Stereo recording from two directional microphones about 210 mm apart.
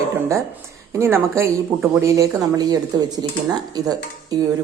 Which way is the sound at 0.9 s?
10° right (ahead or behind).